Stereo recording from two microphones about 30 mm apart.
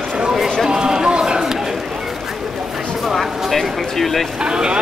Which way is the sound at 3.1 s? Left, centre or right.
Centre.